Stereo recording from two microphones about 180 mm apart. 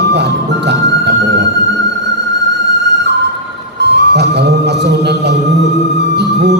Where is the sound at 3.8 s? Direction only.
70° right (ahead or behind).